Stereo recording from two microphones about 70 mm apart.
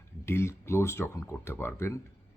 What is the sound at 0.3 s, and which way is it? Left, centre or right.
Speech, left.